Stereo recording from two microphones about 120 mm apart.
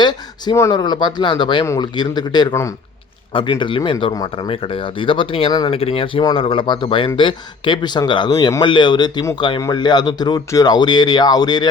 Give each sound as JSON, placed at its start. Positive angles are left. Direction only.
{"t": 0.0, "sound": "speech", "side_deg": 35}
{"t": 2.5, "sound": "speech", "side_deg": 25}
{"t": 3.3, "sound": "speech", "side_deg": 45}
{"t": 4.1, "sound": "speech", "side_deg": 30}
{"t": 4.4, "sound": "speech", "side_deg": 50}
{"t": 5.5, "sound": "speech", "side_deg": 35}
{"t": 5.7, "sound": "speech", "side_deg": 50}